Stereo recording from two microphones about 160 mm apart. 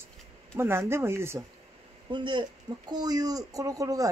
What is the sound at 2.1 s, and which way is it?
A woman's voice, 30° right (ahead or behind).